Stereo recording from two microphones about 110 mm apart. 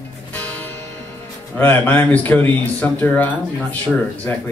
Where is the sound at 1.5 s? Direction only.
15° left (ahead or behind).